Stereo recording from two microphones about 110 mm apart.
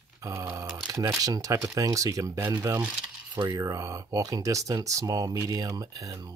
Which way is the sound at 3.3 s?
35° right (ahead or behind).